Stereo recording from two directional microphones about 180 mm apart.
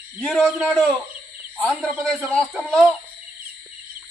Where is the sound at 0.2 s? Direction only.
5° left (ahead or behind).